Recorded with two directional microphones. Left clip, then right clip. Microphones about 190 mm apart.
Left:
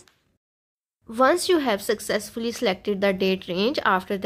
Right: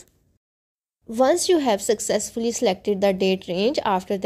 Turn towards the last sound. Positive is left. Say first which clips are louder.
# even
turn(degrees=-15)  # may be behind; listen again after turning